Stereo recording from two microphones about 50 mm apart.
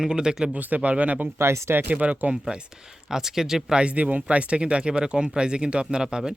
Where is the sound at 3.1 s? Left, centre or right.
Centre.